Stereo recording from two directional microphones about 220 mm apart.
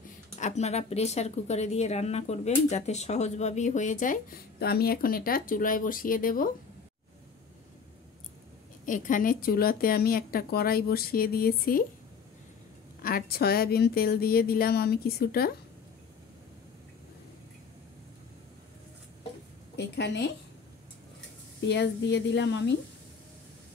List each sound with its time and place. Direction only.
0.4 s speech: 30° left (ahead or behind)
8.8 s a woman's voice: 35° left (ahead or behind)
13.0 s a woman's voice: 45° left (ahead or behind)
19.7 s a woman's voice: 50° left (ahead or behind)
21.6 s a woman's voice: 50° left (ahead or behind)